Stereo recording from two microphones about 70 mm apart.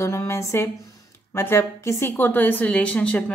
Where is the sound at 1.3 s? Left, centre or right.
Left.